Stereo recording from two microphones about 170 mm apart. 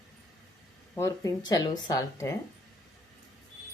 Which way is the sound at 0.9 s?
20° left (ahead or behind).